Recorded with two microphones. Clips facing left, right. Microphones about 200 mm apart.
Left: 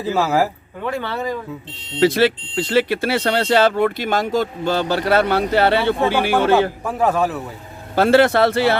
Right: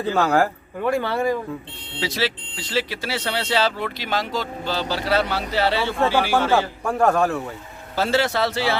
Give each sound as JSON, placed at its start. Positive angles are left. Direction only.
{"t": 0.0, "sound": "a man's voice", "side_deg": 5}
{"t": 0.9, "sound": "speech", "side_deg": -10}
{"t": 2.0, "sound": "speech", "side_deg": 55}
{"t": 6.8, "sound": "a man's voice", "side_deg": 0}
{"t": 7.9, "sound": "speech", "side_deg": 55}